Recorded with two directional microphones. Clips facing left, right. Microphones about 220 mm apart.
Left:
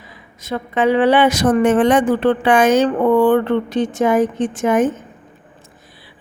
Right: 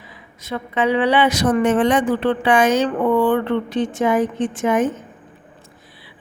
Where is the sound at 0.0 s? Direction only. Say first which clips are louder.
Left 1 dB; 45° left (ahead or behind).